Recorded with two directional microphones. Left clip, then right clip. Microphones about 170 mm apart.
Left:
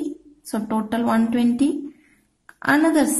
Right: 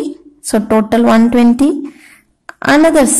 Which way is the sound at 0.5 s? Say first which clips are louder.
Right 13 dB; 35° right (ahead or behind).